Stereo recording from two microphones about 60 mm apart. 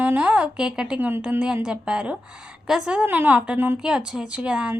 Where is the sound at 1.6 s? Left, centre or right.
Centre.